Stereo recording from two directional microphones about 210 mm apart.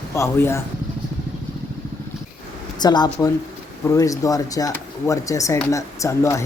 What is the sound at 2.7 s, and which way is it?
Speech, 20° left (ahead or behind).